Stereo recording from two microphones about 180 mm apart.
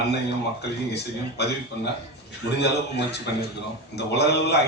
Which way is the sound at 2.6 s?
70° left (ahead or behind).